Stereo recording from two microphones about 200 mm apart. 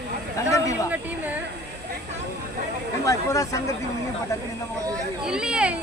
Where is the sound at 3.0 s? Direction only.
15° left (ahead or behind).